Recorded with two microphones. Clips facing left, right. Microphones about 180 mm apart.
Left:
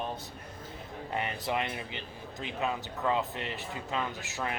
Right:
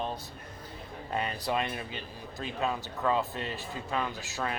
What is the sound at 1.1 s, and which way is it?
A man's voice, 20° left (ahead or behind).